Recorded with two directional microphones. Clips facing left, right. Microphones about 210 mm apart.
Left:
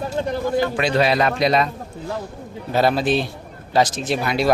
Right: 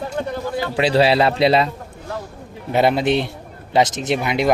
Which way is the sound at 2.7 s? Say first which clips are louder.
Right 2 dB; 20° right (ahead or behind).